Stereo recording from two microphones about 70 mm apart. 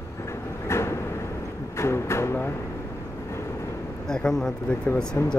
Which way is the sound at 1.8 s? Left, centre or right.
Left.